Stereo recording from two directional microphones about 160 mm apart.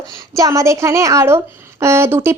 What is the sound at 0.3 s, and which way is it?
A woman's voice, 20° right (ahead or behind).